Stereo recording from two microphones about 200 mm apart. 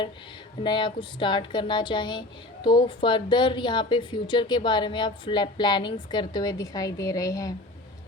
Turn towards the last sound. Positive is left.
turn(degrees=15)  # may be behind; listen again after turning